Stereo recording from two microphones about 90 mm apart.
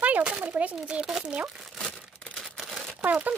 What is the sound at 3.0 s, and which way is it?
Speech, 15° right (ahead or behind).